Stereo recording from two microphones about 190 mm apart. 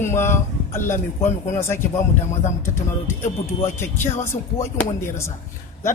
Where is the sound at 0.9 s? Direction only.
40° left (ahead or behind).